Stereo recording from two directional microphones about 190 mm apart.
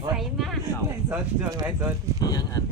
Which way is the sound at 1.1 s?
10° right (ahead or behind).